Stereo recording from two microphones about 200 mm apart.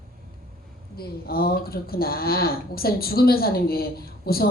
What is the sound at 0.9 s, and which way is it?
Speech, 50° left (ahead or behind).